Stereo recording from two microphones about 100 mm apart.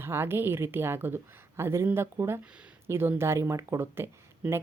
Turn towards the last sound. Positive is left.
turn(degrees=-25)  # may be behind; listen again after turning